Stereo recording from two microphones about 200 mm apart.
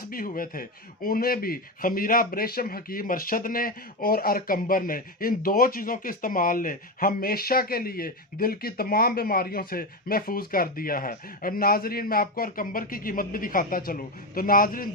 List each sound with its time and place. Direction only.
0.1 s speech: 45° left (ahead or behind)